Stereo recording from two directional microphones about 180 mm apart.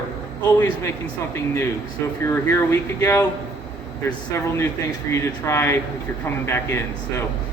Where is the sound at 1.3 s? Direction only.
15° left (ahead or behind).